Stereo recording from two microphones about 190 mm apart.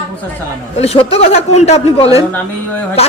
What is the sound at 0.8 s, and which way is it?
A man's voice, 30° left (ahead or behind).